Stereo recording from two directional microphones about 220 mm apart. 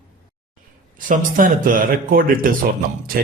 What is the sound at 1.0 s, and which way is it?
A man's voice, 35° right (ahead or behind).